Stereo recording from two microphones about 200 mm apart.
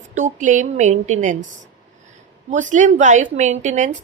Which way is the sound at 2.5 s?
40° right (ahead or behind).